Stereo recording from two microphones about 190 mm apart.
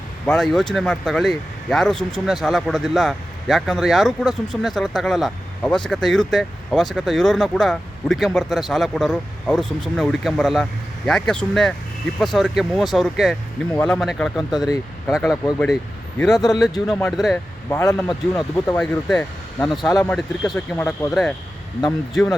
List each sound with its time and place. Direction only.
0.3 s speech: centre (ahead or behind)
15.5 s speech: 5° left (ahead or behind)
16.3 s speech: 20° left (ahead or behind)
16.6 s speech: centre (ahead or behind)
17.3 s speech: 15° left (ahead or behind)
18.8 s speech: 5° left (ahead or behind)
19.8 s speech: 20° left (ahead or behind)
20.1 s speech: centre (ahead or behind)
20.7 s speech: 15° left (ahead or behind)
21.1 s speech: centre (ahead or behind)